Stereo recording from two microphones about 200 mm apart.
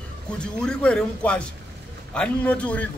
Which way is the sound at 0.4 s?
5° left (ahead or behind).